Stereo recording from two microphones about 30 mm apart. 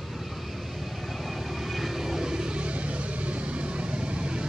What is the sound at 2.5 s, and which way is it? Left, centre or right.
Vehicle, right.